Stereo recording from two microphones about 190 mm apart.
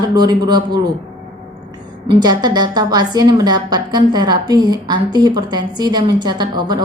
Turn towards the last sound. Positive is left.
turn(degrees=-25)  # may be behind; listen again after turning